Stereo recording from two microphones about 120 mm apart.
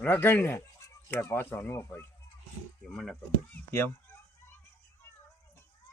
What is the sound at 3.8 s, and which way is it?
Fowl, 15° left (ahead or behind).